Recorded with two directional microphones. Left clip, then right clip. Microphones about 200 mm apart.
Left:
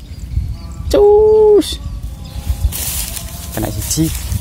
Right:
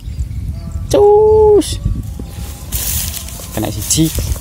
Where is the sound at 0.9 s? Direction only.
Centre (ahead or behind).